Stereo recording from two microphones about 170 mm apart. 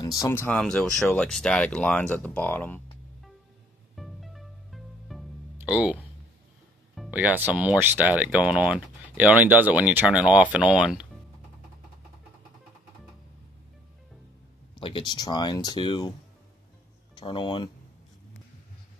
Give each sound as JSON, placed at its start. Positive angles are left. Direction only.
{"t": 0.0, "sound": "speech", "side_deg": 15}
{"t": 3.9, "sound": "music", "side_deg": 0}
{"t": 5.6, "sound": "speech", "side_deg": -10}
{"t": 7.0, "sound": "speech", "side_deg": -10}
{"t": 14.8, "sound": "speech", "side_deg": 30}
{"t": 17.1, "sound": "speech", "side_deg": 30}